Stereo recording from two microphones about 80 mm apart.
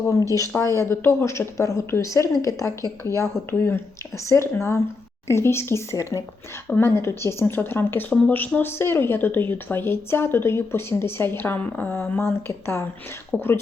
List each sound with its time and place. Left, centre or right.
0.1 s a woman's voice: left